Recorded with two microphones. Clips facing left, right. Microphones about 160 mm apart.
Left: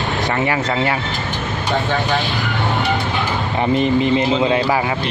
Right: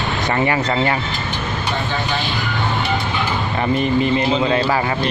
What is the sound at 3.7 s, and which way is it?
Speech, 20° left (ahead or behind).